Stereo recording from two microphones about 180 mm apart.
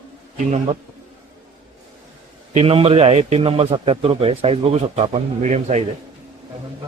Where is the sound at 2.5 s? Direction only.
30° right (ahead or behind).